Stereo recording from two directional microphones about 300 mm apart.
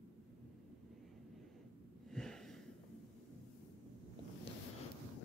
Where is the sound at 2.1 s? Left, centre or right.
Centre.